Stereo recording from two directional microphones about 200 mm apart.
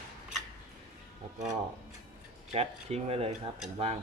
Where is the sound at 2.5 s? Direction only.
30° right (ahead or behind).